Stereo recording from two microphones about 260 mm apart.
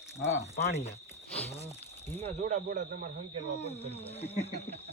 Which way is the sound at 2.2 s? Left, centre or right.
Right.